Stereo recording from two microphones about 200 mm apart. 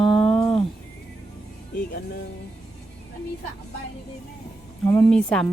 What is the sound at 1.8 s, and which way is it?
Speech, 50° left (ahead or behind).